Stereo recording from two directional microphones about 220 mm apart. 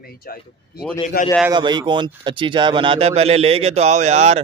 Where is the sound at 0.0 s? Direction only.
45° left (ahead or behind).